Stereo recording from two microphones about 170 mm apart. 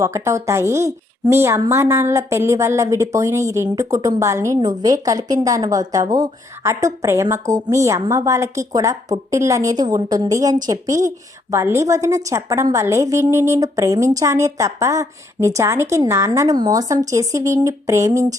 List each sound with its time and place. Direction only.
0.0 s a woman's voice: 15° right (ahead or behind)